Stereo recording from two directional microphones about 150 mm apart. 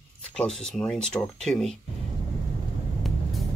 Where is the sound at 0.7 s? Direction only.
5° left (ahead or behind).